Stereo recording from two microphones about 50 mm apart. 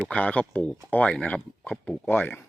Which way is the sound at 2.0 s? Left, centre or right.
Left.